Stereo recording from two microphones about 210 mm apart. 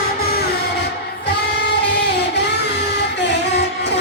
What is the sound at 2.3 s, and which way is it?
Music, 55° left (ahead or behind).